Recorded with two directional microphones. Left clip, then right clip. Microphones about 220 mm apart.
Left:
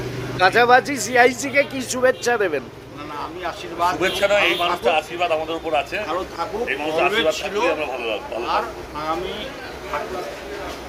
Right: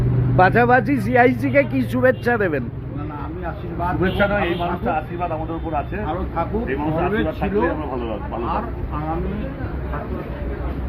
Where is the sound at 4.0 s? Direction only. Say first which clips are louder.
Left 1 dB; 45° left (ahead or behind).